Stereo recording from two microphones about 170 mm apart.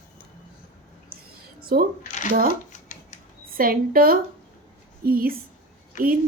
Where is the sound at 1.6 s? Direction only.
60° right (ahead or behind).